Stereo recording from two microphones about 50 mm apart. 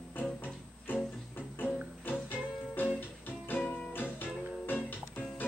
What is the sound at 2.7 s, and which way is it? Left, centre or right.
Music, left.